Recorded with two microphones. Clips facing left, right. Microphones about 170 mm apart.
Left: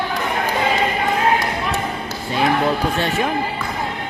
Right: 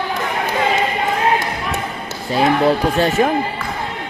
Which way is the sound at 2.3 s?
35° right (ahead or behind).